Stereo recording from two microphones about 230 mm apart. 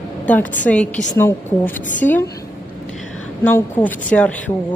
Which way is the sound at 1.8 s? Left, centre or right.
Left.